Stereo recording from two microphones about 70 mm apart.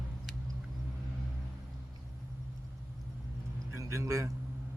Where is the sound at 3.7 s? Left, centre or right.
Right.